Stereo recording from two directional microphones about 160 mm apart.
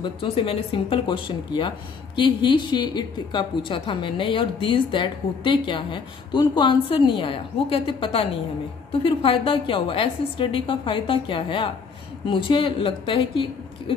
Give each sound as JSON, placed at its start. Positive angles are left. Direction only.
{"t": 0.0, "sound": "a woman's voice", "side_deg": 35}